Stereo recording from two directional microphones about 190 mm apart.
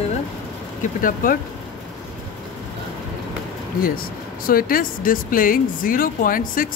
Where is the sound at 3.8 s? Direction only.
50° left (ahead or behind).